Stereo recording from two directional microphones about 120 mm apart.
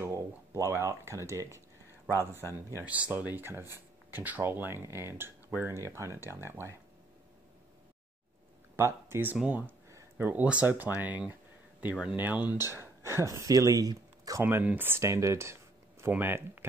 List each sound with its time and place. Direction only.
0.0 s speech: 20° right (ahead or behind)
2.8 s speech: 10° right (ahead or behind)
8.7 s speech: 20° right (ahead or behind)
9.5 s a sound: 15° right (ahead or behind)
10.2 s speech: 10° right (ahead or behind); by 14.4 s 30° right (ahead or behind)
14.4 s speech: 15° right (ahead or behind)